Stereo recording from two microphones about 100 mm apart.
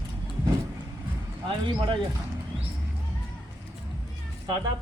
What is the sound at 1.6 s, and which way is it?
Speech, 55° right (ahead or behind).